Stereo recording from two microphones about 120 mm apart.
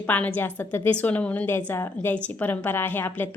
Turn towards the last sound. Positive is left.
turn(degrees=15)  # may be behind; listen again after turning